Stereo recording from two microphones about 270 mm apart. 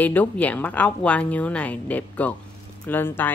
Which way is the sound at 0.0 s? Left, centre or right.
Centre.